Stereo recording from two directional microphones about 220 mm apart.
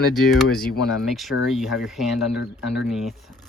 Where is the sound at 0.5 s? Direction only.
40° left (ahead or behind).